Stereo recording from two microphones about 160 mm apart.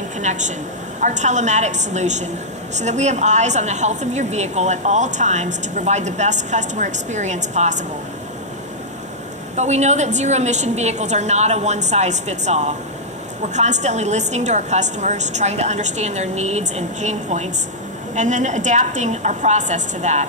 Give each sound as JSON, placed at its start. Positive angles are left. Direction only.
{"t": 0.2, "sound": "a woman's voice", "side_deg": -50}
{"t": 9.6, "sound": "a woman's voice", "side_deg": -45}